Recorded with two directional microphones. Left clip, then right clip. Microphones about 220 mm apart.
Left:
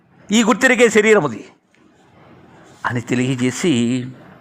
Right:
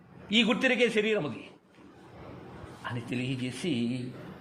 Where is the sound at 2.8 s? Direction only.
35° left (ahead or behind).